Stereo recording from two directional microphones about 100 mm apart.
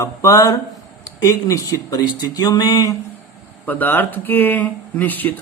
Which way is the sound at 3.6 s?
20° left (ahead or behind).